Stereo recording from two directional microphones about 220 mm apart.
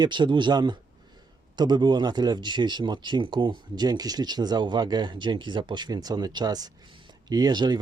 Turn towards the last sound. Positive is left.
turn(degrees=-20)  # may be behind; listen again after turning